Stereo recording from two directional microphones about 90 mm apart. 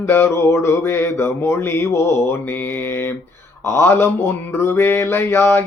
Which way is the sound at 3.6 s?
30° left (ahead or behind).